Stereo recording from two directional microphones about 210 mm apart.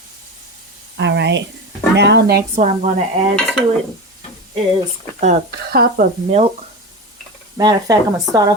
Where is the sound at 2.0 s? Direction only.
55° right (ahead or behind).